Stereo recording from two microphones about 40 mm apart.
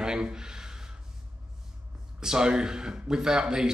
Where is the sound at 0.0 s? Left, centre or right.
Centre.